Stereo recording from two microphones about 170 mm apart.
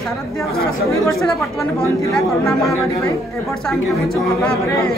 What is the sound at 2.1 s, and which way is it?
A woman's voice, centre (ahead or behind).